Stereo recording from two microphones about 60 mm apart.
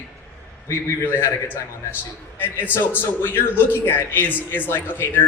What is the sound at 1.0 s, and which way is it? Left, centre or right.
Speech, left.